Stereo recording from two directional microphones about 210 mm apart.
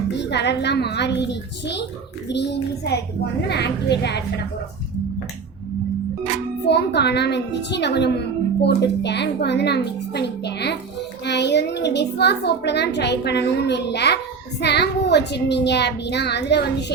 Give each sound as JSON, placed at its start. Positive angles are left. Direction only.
{"t": 0.2, "sound": "a child's voice", "side_deg": 55}
{"t": 6.7, "sound": "a child's voice", "side_deg": 55}